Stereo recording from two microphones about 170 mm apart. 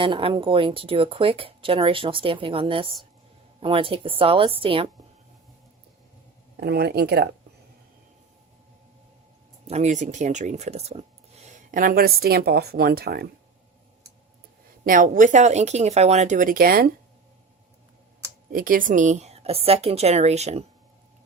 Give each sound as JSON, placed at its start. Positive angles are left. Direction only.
{"t": 0.0, "sound": "speech", "side_deg": -30}
{"t": 6.6, "sound": "speech", "side_deg": -70}
{"t": 9.6, "sound": "speech", "side_deg": -40}
{"t": 11.4, "sound": "speech", "side_deg": -50}
{"t": 14.8, "sound": "speech", "side_deg": -50}
{"t": 18.5, "sound": "speech", "side_deg": -55}